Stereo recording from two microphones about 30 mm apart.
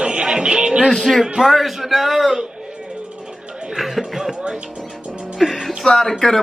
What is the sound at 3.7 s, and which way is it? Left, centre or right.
Speech, centre.